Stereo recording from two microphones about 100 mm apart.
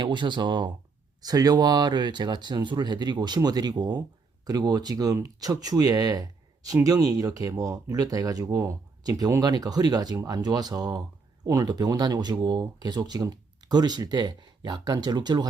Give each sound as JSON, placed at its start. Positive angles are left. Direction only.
{"t": 0.0, "sound": "speech", "side_deg": -50}